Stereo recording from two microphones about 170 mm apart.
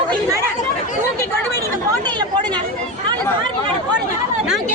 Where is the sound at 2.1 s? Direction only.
25° right (ahead or behind).